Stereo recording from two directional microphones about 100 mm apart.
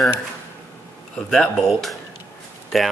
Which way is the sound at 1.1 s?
5° left (ahead or behind).